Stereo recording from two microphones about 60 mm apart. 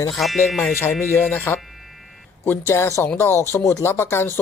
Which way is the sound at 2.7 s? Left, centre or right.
Left.